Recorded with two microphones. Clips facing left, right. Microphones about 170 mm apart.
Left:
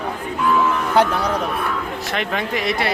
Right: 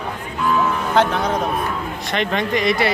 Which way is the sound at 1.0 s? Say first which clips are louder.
Even; 10° left (ahead or behind).